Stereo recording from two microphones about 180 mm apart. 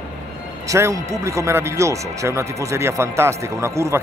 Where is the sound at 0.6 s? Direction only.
15° right (ahead or behind).